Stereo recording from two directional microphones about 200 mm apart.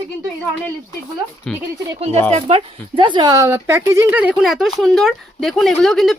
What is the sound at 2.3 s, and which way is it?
Speech, 30° right (ahead or behind).